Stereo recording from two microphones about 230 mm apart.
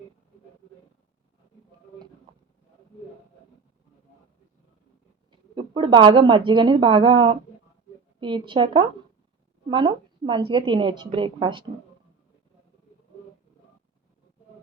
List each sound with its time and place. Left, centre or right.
5.5 s a woman's voice: right